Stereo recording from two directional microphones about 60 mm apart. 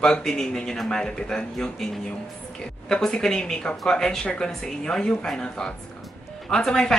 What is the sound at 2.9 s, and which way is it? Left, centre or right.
A woman's voice, centre.